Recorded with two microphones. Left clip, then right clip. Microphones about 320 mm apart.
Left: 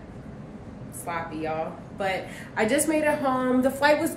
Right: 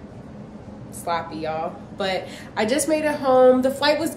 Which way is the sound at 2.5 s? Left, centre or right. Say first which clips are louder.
Right 2 dB; centre.